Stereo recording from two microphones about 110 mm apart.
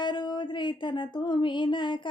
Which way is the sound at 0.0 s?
40° left (ahead or behind).